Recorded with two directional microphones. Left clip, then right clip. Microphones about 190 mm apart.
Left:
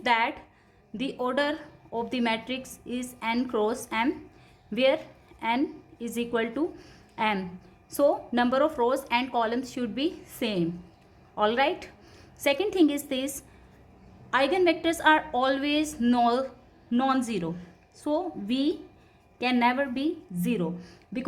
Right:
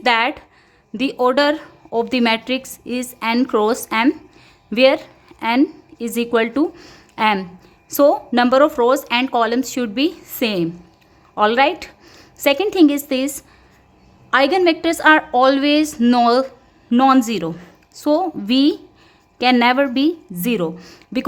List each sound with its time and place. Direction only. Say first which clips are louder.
0.0 s a woman's voice: right 9 dB; 35° right (ahead or behind)